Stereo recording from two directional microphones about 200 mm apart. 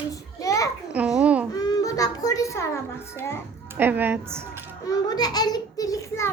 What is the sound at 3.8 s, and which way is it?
Speech, 10° right (ahead or behind).